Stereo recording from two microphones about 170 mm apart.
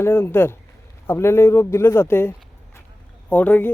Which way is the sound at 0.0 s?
15° left (ahead or behind).